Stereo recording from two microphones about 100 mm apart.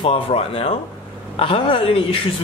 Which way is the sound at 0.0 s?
70° left (ahead or behind).